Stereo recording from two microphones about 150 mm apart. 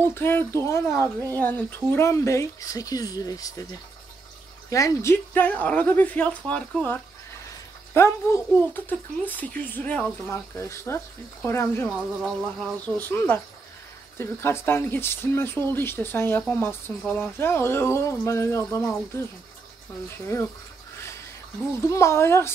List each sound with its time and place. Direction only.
0.0 s speech: 15° left (ahead or behind)
4.6 s speech: 20° left (ahead or behind)
12.2 s speech: 5° left (ahead or behind)
21.8 s speech: 20° left (ahead or behind)